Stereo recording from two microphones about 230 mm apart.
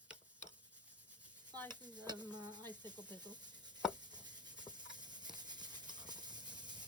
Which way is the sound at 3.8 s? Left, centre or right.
Centre.